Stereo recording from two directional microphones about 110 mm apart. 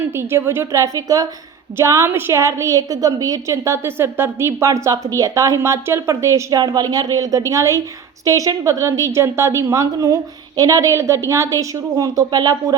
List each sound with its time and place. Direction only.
0.0 s a woman's voice: 20° right (ahead or behind); by 12.7 s 40° right (ahead or behind)